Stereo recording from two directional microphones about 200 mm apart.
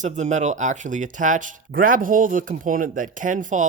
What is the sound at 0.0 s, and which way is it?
Speech, 35° right (ahead or behind).